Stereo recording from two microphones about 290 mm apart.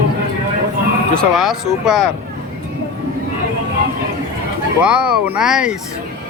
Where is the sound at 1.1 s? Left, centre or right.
Centre.